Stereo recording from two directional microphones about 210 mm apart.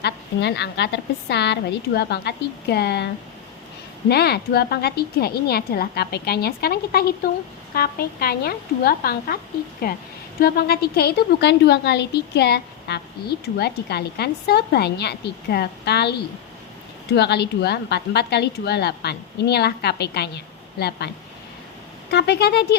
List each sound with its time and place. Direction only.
0.0 s a woman's voice: 55° left (ahead or behind)
4.1 s a woman's voice: 50° left (ahead or behind)
10.4 s a woman's voice: 50° left (ahead or behind)
17.2 s a woman's voice: 50° left (ahead or behind)
22.1 s a woman's voice: 50° left (ahead or behind)